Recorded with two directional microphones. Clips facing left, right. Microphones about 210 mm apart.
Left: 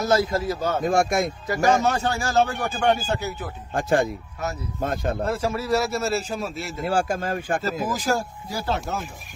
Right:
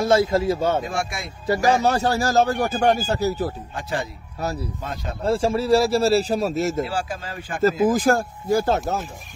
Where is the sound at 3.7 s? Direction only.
50° left (ahead or behind).